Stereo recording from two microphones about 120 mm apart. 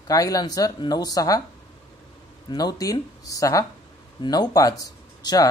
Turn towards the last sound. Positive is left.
turn(degrees=35)  # may be behind; listen again after turning